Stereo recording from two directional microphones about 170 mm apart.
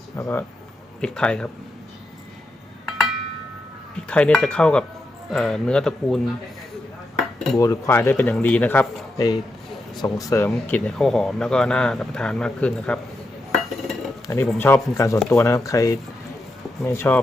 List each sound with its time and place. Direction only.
0.2 s speech: 15° left (ahead or behind)
4.1 s speech: 5° left (ahead or behind)
7.2 s cutlery: centre (ahead or behind)
7.6 s speech: 15° left (ahead or behind)
13.5 s dishes: centre (ahead or behind)
14.6 s speech: 15° left (ahead or behind)